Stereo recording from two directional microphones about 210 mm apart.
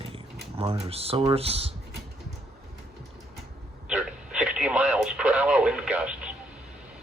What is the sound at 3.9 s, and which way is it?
Radio, 5° right (ahead or behind).